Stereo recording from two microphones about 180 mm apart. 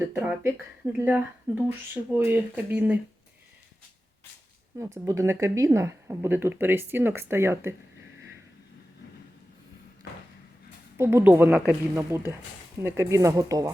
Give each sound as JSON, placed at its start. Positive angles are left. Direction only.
{"t": 0.1, "sound": "speech", "side_deg": -10}
{"t": 5.0, "sound": "speech", "side_deg": -15}
{"t": 10.9, "sound": "speech", "side_deg": -15}